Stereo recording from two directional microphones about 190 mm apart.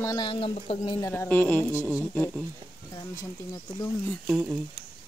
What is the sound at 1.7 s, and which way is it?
Speech, 10° right (ahead or behind).